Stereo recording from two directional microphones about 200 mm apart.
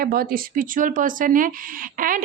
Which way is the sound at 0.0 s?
50° right (ahead or behind).